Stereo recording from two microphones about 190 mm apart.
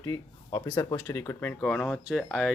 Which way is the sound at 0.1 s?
20° left (ahead or behind).